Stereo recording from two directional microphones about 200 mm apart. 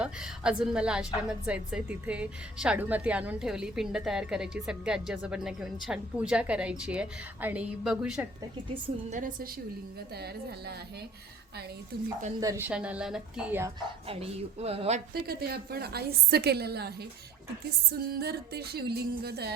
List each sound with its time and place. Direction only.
0.0 s a woman's voice: 5° right (ahead or behind)
8.7 s a woman's voice: 35° right (ahead or behind)
10.2 s a woman's voice: 55° right (ahead or behind)
12.4 s a woman's voice: 15° right (ahead or behind)
13.7 s speech: 30° right (ahead or behind)
15.1 s a woman's voice: 50° right (ahead or behind)